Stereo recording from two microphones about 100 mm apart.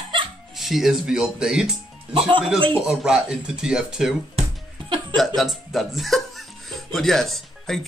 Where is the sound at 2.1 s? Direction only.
55° right (ahead or behind).